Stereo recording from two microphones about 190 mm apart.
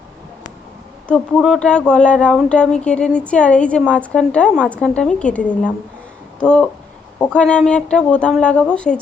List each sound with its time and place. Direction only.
1.0 s speech: 5° left (ahead or behind)